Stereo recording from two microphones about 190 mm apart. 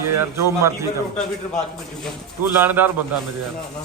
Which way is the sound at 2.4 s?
10° right (ahead or behind).